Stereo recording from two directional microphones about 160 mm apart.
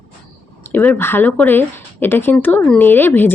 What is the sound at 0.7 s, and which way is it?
Speech, 10° left (ahead or behind).